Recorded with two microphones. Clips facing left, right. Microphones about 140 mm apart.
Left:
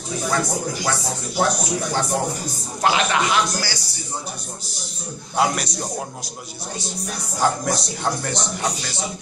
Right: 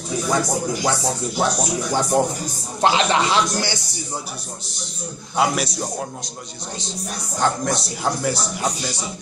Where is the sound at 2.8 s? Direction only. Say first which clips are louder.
Right 2 dB; 30° right (ahead or behind).